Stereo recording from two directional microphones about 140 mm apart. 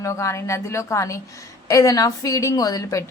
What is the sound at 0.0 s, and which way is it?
A woman's voice, 20° left (ahead or behind).